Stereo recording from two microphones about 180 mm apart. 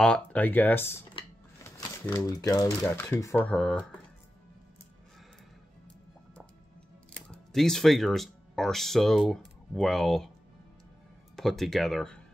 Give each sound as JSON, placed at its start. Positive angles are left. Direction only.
{"t": 0.0, "sound": "speech", "side_deg": 5}
{"t": 7.2, "sound": "speech", "side_deg": 5}
{"t": 11.3, "sound": "speech", "side_deg": 0}